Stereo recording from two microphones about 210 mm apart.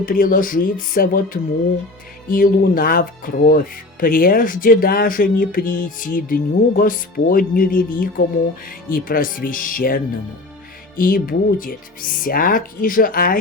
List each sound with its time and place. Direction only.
0.0 s speech: 40° left (ahead or behind)